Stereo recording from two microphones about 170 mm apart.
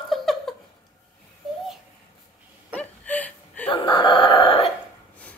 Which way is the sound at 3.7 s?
30° left (ahead or behind).